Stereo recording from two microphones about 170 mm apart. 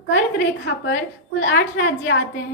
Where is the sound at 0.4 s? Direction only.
90° left.